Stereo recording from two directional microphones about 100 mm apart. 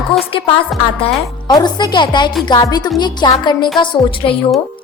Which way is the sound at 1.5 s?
45° left (ahead or behind).